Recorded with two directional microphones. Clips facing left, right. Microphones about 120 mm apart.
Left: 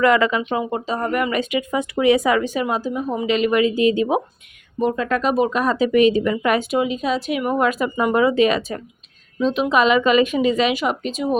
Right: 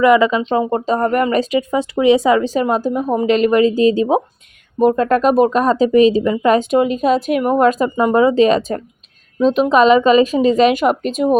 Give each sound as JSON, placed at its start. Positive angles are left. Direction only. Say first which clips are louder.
{"t": 0.0, "sound": "speech", "louder": "right 5 dB", "side_deg": -20}
{"t": 0.5, "sound": "speech", "louder": "right 6 dB", "side_deg": -40}
{"t": 4.8, "sound": "speech", "louder": "right 7 dB", "side_deg": -45}
{"t": 6.7, "sound": "speech", "louder": "right 6 dB", "side_deg": -45}